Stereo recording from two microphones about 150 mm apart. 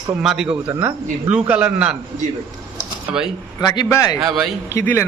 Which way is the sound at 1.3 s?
10° right (ahead or behind).